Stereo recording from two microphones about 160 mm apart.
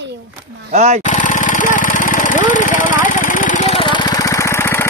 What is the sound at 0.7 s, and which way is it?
Speech, 45° right (ahead or behind).